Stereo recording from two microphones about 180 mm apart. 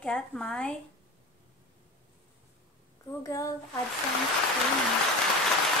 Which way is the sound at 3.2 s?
20° left (ahead or behind).